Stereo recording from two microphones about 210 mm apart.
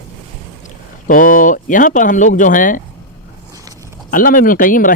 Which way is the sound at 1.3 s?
40° left (ahead or behind).